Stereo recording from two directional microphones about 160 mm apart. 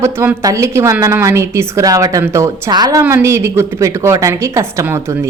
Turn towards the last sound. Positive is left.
turn(degrees=-15)  # may be behind; listen again after turning